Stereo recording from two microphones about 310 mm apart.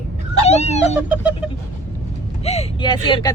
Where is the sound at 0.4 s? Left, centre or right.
Left.